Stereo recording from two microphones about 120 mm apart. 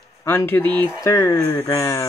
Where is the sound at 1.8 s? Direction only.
25° left (ahead or behind).